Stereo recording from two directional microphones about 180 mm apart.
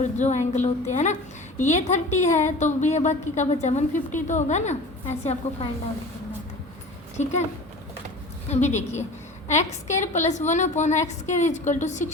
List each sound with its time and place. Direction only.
0.0 s a woman's voice: 40° left (ahead or behind)
7.2 s a woman's voice: 40° left (ahead or behind)
8.4 s a woman's voice: 40° left (ahead or behind)